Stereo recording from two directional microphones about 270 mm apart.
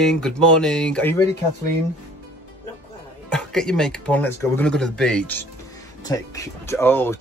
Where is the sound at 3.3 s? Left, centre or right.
Centre.